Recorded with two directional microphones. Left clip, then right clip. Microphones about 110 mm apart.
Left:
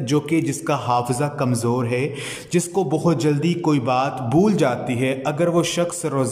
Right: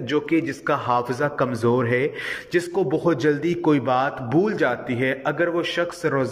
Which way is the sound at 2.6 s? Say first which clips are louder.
Left 2 dB; 30° left (ahead or behind).